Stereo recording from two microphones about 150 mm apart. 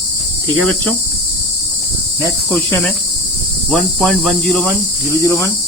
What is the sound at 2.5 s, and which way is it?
Cricket, 5° left (ahead or behind).